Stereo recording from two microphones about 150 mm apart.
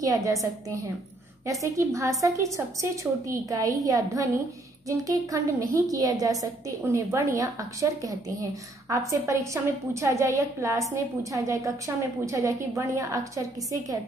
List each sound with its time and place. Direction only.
0.0 s a woman's voice: 20° right (ahead or behind)